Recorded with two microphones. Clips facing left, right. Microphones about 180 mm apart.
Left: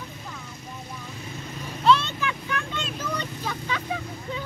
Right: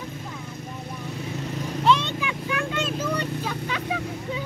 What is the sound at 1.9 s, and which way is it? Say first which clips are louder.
Vehicle: left 1 dB; 15° right (ahead or behind).